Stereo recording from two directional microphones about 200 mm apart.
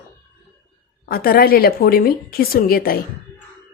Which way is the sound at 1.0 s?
45° left (ahead or behind).